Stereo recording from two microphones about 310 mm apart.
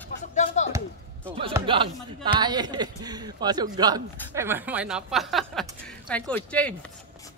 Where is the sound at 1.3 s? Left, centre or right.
Centre.